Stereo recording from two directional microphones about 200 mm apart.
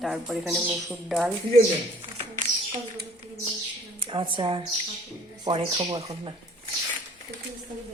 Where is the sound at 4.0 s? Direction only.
25° right (ahead or behind).